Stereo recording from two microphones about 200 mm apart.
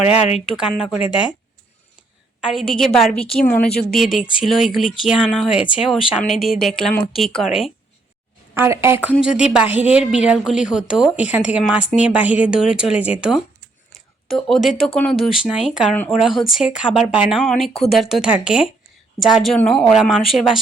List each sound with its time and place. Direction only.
0.6 s a woman's voice: centre (ahead or behind)
2.4 s a woman's voice: centre (ahead or behind)
8.5 s a woman's voice: 15° right (ahead or behind)